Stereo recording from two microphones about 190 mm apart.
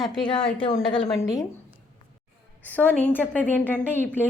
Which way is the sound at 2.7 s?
10° left (ahead or behind).